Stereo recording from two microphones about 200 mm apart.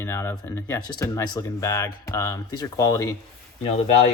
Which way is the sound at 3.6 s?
30° left (ahead or behind).